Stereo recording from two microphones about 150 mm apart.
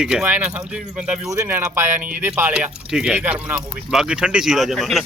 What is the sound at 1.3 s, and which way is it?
Speech, 20° right (ahead or behind).